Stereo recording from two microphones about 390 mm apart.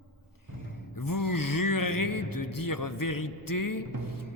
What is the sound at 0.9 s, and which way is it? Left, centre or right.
A man's voice, left.